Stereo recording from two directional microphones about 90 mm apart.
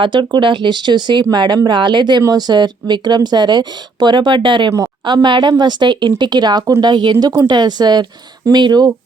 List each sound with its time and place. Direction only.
0.0 s speech: 60° right (ahead or behind)